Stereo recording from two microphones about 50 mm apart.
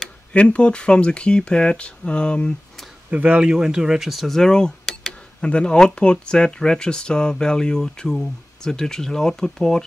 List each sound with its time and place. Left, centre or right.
0.3 s speech: left
3.1 s speech: right
3.4 s speech: centre